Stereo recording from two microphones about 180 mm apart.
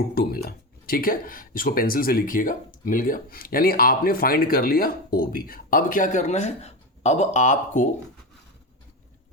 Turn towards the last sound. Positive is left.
turn(degrees=45)  # may be behind; listen again after turning